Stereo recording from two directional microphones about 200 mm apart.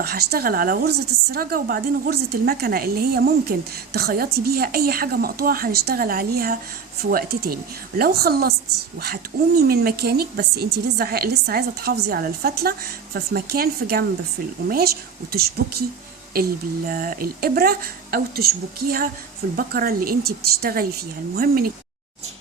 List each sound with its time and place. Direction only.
0.0 s a woman's voice: 50° right (ahead or behind)